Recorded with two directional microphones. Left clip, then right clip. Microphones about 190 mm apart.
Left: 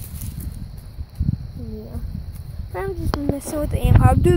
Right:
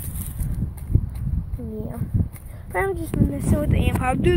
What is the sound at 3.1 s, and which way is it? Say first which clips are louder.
Speech: left 1 dB; 20° left (ahead or behind).